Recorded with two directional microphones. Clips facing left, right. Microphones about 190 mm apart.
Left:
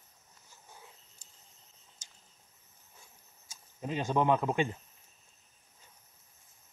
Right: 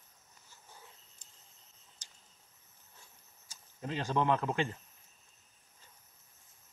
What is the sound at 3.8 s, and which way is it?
Speech, 15° left (ahead or behind).